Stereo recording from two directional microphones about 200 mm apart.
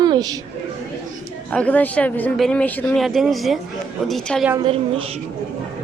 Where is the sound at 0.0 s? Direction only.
20° right (ahead or behind).